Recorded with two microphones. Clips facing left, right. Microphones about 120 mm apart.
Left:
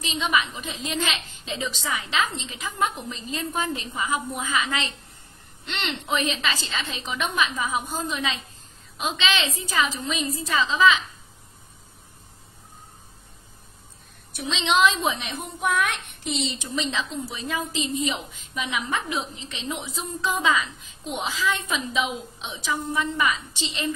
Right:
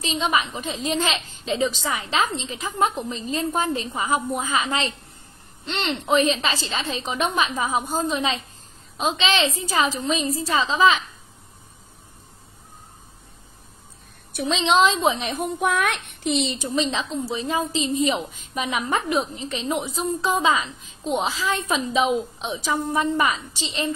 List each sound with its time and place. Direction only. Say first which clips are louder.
0.0 s a woman's voice: right 2 dB; 35° right (ahead or behind)
14.5 s a woman's voice: right 3 dB; 35° right (ahead or behind)
15.6 s a child's voice: right 1 dB; 60° right (ahead or behind)
16.7 s a woman's voice: right 4 dB; 30° right (ahead or behind); by 20.2 s 50° right (ahead or behind)
20.2 s a woman's voice: right 1 dB; 30° right (ahead or behind)